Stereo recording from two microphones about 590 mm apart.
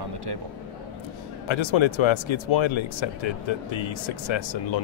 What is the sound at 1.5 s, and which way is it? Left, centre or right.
Speech, left.